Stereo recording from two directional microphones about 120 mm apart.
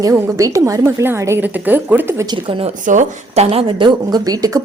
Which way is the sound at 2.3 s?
45° right (ahead or behind).